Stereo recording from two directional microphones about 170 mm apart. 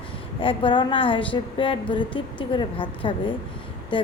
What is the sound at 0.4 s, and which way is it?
A woman's voice, 30° left (ahead or behind).